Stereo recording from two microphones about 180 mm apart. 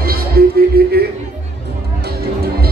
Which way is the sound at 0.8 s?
60° right (ahead or behind).